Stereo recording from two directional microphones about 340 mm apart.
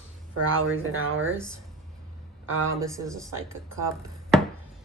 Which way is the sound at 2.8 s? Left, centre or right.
Centre.